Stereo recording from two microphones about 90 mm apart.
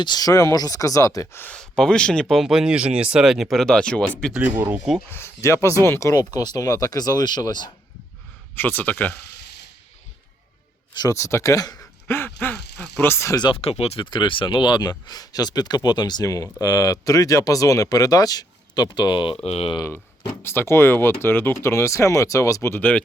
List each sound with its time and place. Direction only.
0.0 s speech: 50° left (ahead or behind)
1.5 s speech: 10° left (ahead or behind)
2.3 s speech: 5° right (ahead or behind)
4.4 s speech: 20° right (ahead or behind)
5.1 s speech: 30° left (ahead or behind); by 7.7 s 55° left (ahead or behind)
8.5 s speech: 20° left (ahead or behind)
11.1 s speech: 35° left (ahead or behind)
12.0 s speech: 25° left (ahead or behind)
13.3 s speech: 55° left (ahead or behind)
13.6 s speech: 80° left
20.4 s speech: 25° left (ahead or behind)
21.6 s speech: 35° left (ahead or behind)
22.7 s speech: 20° left (ahead or behind)